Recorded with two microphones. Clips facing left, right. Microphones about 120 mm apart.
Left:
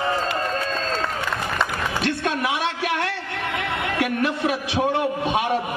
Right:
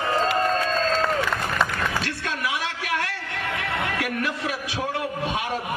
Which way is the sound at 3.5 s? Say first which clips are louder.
Left 3 dB; 25° left (ahead or behind).